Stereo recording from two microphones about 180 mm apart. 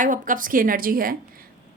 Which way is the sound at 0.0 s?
45° right (ahead or behind).